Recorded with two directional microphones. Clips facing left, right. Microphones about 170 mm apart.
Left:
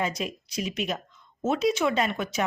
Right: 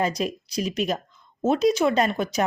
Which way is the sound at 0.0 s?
40° right (ahead or behind).